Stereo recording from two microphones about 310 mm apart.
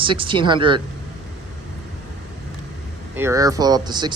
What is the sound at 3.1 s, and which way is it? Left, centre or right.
Speech, centre.